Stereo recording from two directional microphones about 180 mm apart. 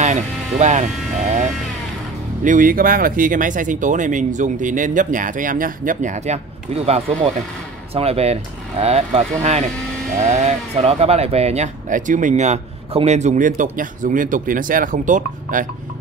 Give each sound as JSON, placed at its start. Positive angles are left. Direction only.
{"t": 0.0, "sound": "speech", "side_deg": -40}
{"t": 2.4, "sound": "speech", "side_deg": -50}